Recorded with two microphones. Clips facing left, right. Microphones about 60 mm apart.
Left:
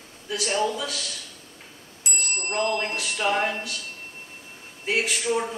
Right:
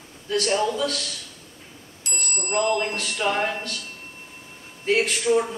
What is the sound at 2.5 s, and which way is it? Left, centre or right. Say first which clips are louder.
Speech: right 3 dB; centre.